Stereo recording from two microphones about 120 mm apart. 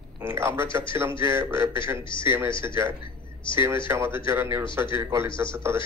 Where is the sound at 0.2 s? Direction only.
20° right (ahead or behind).